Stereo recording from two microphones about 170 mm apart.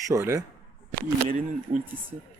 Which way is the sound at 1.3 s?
50° right (ahead or behind).